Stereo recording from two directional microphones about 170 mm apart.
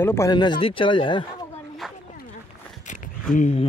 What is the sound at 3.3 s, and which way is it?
Speech, 45° left (ahead or behind).